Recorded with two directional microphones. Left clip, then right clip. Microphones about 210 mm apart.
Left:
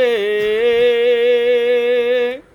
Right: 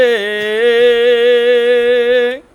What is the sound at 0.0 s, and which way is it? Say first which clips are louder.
Music: right 3 dB; 20° right (ahead or behind).